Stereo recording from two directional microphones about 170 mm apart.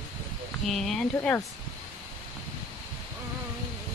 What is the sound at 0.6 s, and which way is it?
Speech, centre (ahead or behind).